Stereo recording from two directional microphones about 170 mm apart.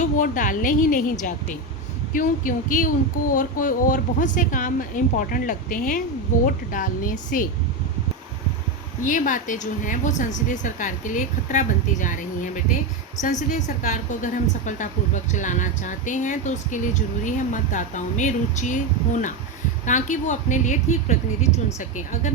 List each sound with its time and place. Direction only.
0.0 s a woman's voice: 50° left (ahead or behind)
2.1 s a woman's voice: 55° left (ahead or behind)
9.0 s a woman's voice: 50° left (ahead or behind)